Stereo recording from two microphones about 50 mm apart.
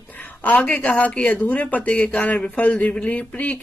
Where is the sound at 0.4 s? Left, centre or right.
Left.